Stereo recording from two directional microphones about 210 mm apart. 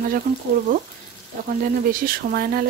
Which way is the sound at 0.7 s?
40° right (ahead or behind).